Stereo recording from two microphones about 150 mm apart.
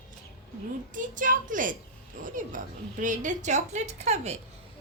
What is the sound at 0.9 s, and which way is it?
A woman's voice, 60° right (ahead or behind).